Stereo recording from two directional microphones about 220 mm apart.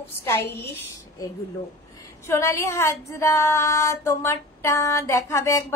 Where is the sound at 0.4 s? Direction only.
45° left (ahead or behind).